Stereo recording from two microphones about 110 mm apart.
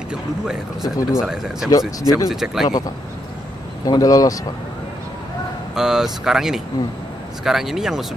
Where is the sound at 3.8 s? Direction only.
35° left (ahead or behind).